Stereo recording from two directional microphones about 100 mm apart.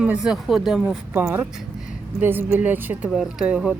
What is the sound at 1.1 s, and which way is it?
A woman's voice, 30° right (ahead or behind).